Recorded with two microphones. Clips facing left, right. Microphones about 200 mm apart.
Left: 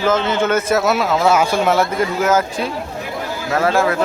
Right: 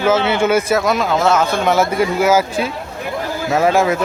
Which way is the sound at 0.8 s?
5° left (ahead or behind).